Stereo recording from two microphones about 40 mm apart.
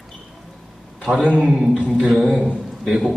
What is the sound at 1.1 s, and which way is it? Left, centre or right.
Speech, right.